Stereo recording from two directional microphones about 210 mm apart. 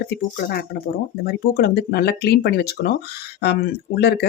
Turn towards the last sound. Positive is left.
turn(degrees=50)  # may be behind; listen again after turning